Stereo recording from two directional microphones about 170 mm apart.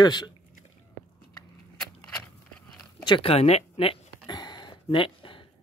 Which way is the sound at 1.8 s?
5° left (ahead or behind).